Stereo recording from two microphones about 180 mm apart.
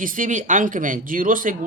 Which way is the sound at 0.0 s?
45° right (ahead or behind).